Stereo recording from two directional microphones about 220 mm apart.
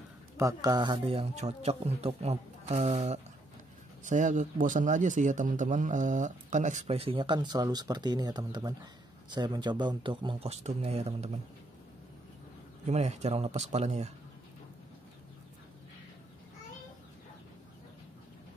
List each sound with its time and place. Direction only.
0.4 s speech: 15° right (ahead or behind)
12.8 s speech: 30° right (ahead or behind)